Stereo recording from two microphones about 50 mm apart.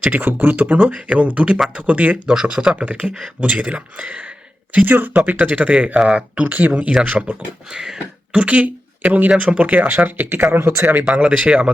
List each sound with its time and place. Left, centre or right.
0.0 s speech: right
0.8 s speech: right
2.2 s speech: centre; by 4.2 s right
4.7 s speech: right
6.5 s speech: right
7.7 s speech: centre
8.3 s speech: right
10.0 s speech: right
10.5 s speech: right
11.0 s speech: right